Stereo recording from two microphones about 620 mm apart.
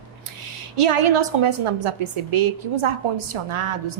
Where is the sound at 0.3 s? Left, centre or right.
Right.